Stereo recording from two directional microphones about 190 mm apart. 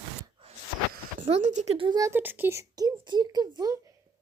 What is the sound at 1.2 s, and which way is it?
Speech, 35° right (ahead or behind).